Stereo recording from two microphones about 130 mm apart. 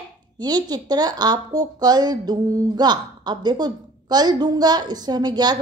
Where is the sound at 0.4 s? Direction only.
30° right (ahead or behind).